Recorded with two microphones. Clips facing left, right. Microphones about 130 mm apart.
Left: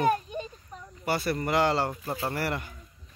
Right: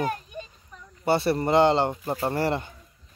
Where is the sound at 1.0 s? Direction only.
25° right (ahead or behind).